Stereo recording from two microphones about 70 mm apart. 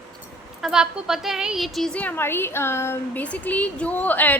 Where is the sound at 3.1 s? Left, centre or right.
Left.